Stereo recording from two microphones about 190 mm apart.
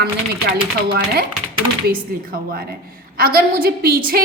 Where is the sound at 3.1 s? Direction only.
50° right (ahead or behind).